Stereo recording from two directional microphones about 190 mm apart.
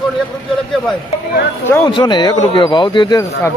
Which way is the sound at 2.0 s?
25° left (ahead or behind).